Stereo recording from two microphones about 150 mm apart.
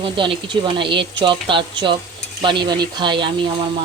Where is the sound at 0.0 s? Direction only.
35° right (ahead or behind).